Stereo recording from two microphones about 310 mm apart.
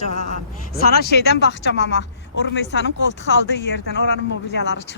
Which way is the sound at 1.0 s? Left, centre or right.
Left.